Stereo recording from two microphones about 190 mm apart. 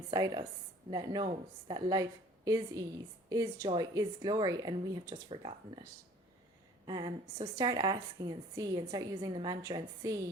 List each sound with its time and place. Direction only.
0.1 s speech: 20° right (ahead or behind)
6.8 s speech: 20° right (ahead or behind)